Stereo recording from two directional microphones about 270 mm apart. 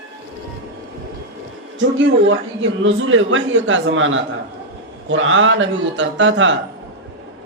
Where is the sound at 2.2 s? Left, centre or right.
Right.